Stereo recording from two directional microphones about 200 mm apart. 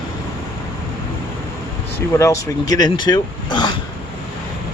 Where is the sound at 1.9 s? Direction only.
15° left (ahead or behind).